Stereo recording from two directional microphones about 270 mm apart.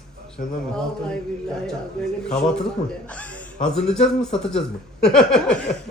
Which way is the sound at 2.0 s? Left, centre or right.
Centre.